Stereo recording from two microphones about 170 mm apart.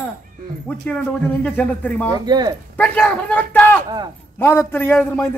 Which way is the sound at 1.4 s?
10° left (ahead or behind).